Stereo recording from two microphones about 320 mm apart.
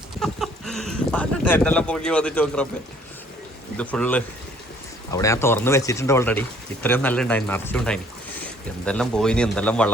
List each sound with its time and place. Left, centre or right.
0.2 s speech: centre
3.8 s speech: centre